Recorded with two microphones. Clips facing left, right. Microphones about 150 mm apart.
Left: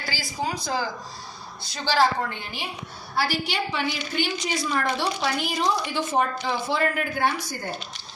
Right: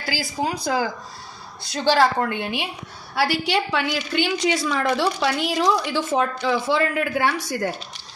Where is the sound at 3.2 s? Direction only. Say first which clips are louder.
Right 5 dB; 85° right.